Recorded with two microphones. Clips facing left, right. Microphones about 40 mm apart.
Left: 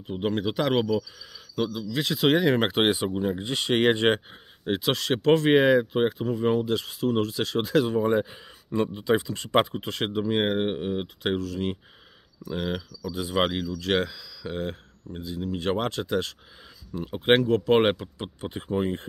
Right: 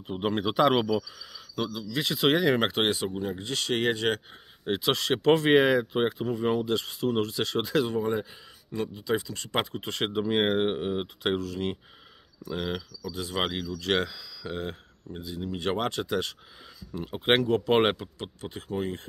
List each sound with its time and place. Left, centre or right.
0.0 s speech: centre
1.2 s speech: centre; by 4.2 s left
4.6 s speech: centre
8.1 s speech: centre
8.8 s speech: left
9.8 s speech: centre
12.9 s speech: centre
18.4 s speech: left